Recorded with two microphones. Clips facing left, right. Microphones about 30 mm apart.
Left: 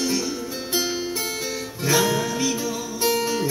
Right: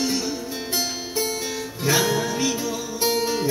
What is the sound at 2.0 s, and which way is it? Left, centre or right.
Music, centre.